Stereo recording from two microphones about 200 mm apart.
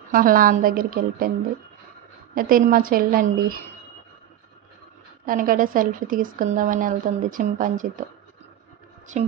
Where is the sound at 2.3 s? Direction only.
45° right (ahead or behind).